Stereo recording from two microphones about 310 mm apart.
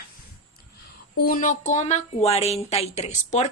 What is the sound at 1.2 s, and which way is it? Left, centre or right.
Speech, left.